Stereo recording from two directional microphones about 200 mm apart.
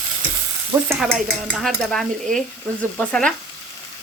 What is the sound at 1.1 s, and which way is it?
Dishes, centre (ahead or behind).